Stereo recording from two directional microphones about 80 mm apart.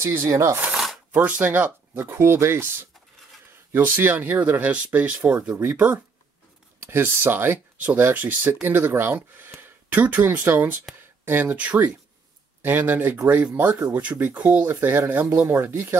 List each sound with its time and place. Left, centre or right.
0.0 s speech: right
1.1 s speech: centre